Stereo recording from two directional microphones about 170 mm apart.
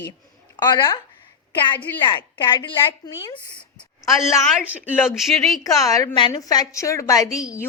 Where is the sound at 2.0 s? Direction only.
25° left (ahead or behind).